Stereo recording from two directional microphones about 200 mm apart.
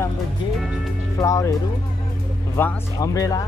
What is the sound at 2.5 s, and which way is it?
Speech, 10° left (ahead or behind).